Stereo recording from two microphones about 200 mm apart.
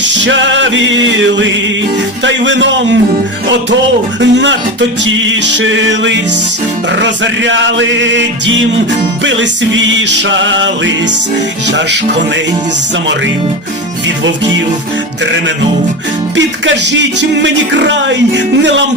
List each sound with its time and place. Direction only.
0.0 s music: 65° right (ahead or behind)
2.2 s speech: 65° right (ahead or behind)
4.2 s speech: 60° right (ahead or behind)
5.4 s music: 65° right (ahead or behind)
16.3 s speech: 65° right (ahead or behind)